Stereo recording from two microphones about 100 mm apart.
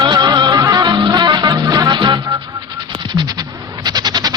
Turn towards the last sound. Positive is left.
turn(degrees=-45)  # may be behind; listen again after turning